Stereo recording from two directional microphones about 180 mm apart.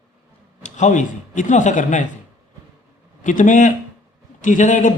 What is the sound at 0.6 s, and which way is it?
A man's voice, 45° left (ahead or behind).